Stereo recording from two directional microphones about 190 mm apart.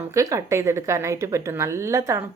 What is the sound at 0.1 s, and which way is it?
A woman's voice, 15° right (ahead or behind).